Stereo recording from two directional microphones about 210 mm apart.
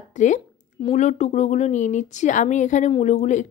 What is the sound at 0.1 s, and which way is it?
Speech, 35° left (ahead or behind).